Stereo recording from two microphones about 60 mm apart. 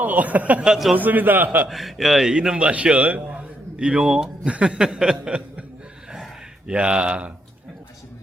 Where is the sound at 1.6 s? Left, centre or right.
Centre.